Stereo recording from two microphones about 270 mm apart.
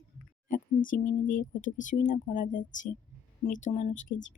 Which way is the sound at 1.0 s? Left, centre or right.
Left.